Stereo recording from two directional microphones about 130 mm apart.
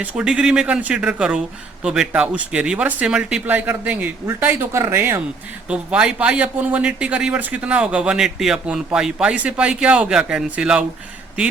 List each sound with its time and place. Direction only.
0.0 s speech: 10° right (ahead or behind)